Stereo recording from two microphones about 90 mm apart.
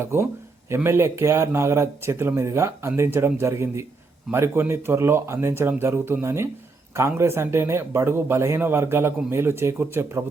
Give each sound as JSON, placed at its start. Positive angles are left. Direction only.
{"t": 0.0, "sound": "a man's voice", "side_deg": -30}